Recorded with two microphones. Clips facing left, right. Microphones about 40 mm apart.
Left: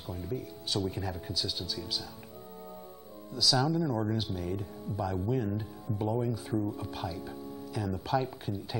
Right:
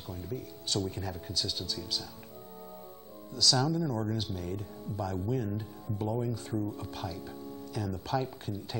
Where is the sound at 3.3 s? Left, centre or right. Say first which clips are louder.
Even; centre.